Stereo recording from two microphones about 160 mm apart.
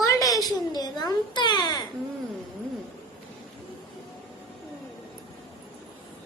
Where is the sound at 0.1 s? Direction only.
20° left (ahead or behind).